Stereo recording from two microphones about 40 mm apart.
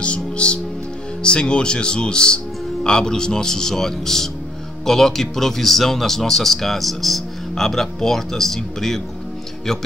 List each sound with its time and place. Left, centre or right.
0.0 s music: left
1.2 s speech: left